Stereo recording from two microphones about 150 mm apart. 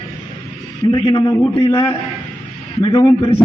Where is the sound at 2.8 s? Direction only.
25° left (ahead or behind).